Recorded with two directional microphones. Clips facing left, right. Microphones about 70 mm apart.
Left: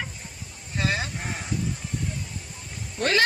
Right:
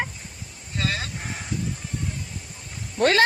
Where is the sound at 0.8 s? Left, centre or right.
Left.